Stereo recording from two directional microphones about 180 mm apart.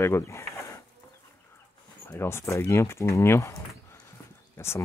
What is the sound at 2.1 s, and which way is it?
Speech, 15° left (ahead or behind).